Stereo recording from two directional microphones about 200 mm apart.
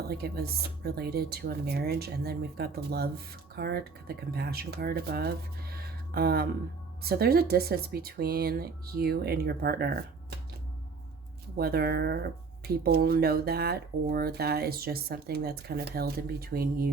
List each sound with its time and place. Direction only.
0.1 s speech: 50° right (ahead or behind)
11.5 s speech: 50° right (ahead or behind)